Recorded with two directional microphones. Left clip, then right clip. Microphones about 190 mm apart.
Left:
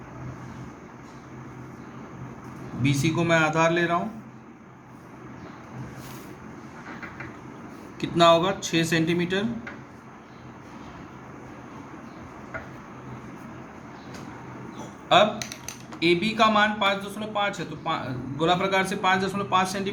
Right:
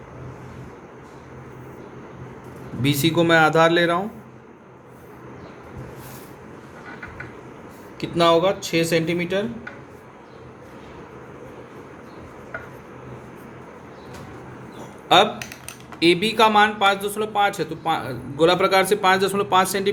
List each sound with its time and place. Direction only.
2.8 s speech: 35° right (ahead or behind)
8.0 s speech: 15° right (ahead or behind)
15.1 s speech: 45° right (ahead or behind)